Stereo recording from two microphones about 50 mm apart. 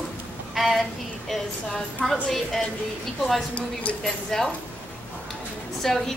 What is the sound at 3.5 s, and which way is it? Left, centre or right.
Speech, left.